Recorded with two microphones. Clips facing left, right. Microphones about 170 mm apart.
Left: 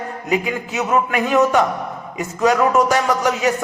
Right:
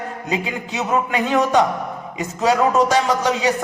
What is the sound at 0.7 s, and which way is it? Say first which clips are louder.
Speech: left 1 dB; 20° right (ahead or behind).